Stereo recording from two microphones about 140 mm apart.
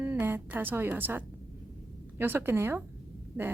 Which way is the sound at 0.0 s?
15° right (ahead or behind).